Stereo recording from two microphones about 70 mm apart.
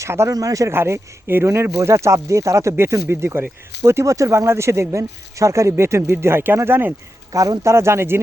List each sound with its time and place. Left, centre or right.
0.0 s speech: right
0.3 s speech: right
0.7 s speech: right
7.3 s speech: right
7.6 s speech: right